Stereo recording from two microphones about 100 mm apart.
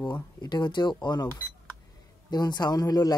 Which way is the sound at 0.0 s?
45° left (ahead or behind).